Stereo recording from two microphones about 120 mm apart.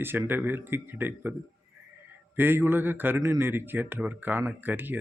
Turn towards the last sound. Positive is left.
turn(degrees=-15)  # may be behind; listen again after turning